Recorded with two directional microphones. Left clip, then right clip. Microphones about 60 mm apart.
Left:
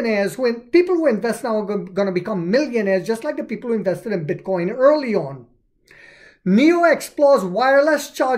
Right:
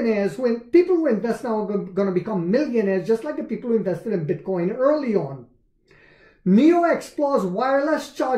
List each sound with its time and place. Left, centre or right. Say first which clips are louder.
0.0 s speech: left 2 dB; left
6.4 s speech: left 2 dB; left